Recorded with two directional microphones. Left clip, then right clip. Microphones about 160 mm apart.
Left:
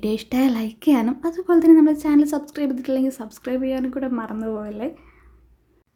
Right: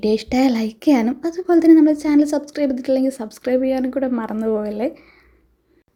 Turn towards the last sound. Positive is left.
turn(degrees=-20)  # may be behind; listen again after turning